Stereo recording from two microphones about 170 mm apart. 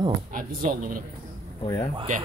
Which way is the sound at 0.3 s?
55° right (ahead or behind).